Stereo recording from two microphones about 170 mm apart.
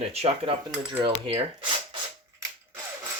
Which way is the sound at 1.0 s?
30° right (ahead or behind).